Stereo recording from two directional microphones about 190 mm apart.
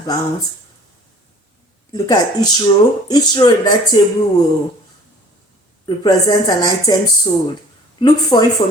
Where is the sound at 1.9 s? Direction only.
20° left (ahead or behind).